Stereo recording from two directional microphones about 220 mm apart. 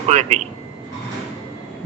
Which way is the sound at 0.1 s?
30° right (ahead or behind).